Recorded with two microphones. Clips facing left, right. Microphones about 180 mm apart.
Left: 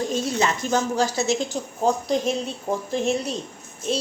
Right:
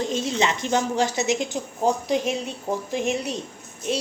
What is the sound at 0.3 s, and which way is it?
A woman's voice, 20° right (ahead or behind).